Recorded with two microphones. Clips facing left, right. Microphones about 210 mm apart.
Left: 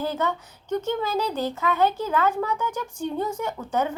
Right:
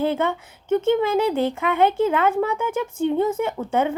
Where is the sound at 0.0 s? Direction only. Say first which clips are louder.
Right 5 dB; 25° right (ahead or behind).